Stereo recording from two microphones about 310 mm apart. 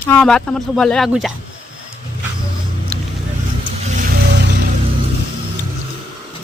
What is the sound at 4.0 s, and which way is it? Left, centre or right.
Vehicle, right.